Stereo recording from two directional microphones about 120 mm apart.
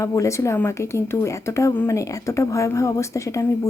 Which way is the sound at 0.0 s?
25° left (ahead or behind).